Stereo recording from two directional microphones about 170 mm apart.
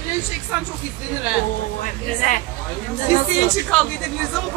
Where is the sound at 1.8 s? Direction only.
50° left (ahead or behind).